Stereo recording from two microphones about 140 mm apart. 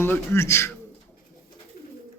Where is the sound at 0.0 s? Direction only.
15° left (ahead or behind).